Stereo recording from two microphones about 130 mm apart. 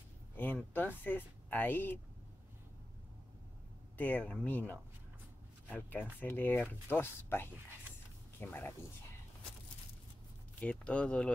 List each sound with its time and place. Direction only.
0.4 s speech: 10° left (ahead or behind)
4.0 s speech: 10° left (ahead or behind)
10.6 s speech: 10° left (ahead or behind)